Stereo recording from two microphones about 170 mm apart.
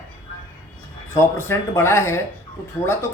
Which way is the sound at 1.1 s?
15° left (ahead or behind).